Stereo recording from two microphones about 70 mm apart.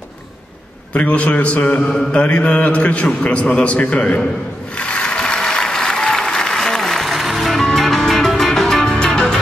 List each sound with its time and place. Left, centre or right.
0.9 s a man's voice: centre
4.7 s applause: centre
8.5 s music: centre